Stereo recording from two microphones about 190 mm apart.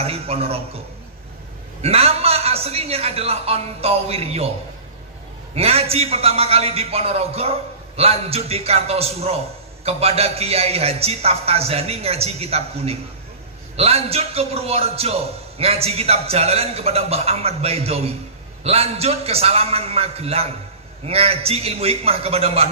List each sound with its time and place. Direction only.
0.0 s a man's voice: 30° right (ahead or behind)
1.8 s a man's voice: 30° right (ahead or behind)
5.5 s a man's voice: 30° right (ahead or behind)